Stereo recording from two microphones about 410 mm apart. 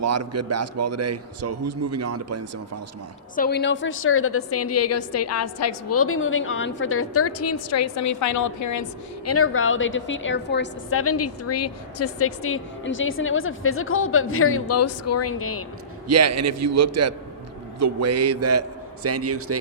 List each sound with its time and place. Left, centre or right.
0.0 s a man's voice: right
3.3 s a woman's voice: left
16.0 s a man's voice: right